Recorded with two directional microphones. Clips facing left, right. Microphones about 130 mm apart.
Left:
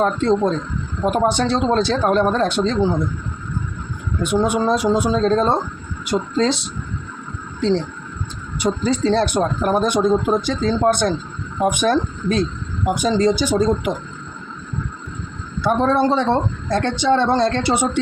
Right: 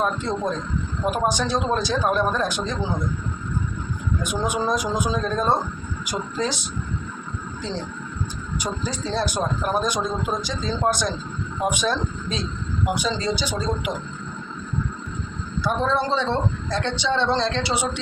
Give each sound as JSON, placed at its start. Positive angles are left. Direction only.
{"t": 0.0, "sound": "speech", "side_deg": 70}
{"t": 4.2, "sound": "speech", "side_deg": 65}
{"t": 7.6, "sound": "speech", "side_deg": 65}
{"t": 15.6, "sound": "speech", "side_deg": 60}